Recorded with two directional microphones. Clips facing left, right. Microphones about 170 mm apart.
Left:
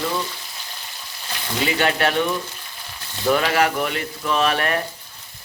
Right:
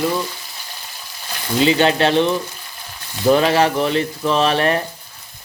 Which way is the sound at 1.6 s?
25° right (ahead or behind).